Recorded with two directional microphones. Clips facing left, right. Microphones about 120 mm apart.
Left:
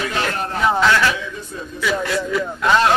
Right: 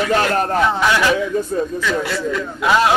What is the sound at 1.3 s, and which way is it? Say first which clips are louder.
Speech: right 14 dB; 45° right (ahead or behind).